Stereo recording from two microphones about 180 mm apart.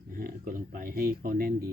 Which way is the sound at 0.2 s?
50° right (ahead or behind).